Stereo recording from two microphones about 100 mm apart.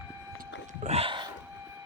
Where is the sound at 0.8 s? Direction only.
90° right.